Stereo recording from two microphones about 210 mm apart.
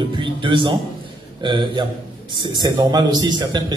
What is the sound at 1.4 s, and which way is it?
A man's voice, 20° right (ahead or behind).